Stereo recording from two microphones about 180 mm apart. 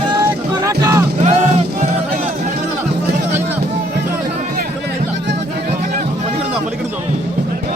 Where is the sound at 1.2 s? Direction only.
40° right (ahead or behind).